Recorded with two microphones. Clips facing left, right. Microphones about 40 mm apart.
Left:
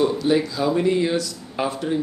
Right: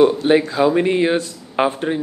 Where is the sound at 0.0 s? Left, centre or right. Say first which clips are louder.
Right 6 dB; right.